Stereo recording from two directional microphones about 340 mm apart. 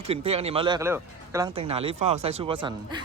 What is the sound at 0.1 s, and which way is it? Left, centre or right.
Speech, centre.